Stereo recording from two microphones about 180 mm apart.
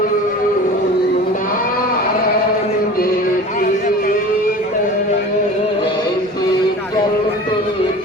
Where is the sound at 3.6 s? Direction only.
50° left (ahead or behind).